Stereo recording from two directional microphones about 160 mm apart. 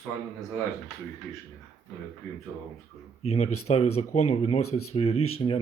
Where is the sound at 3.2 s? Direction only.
40° left (ahead or behind).